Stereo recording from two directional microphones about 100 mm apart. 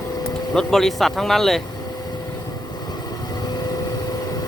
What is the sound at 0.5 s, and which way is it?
Speech, 5° left (ahead or behind).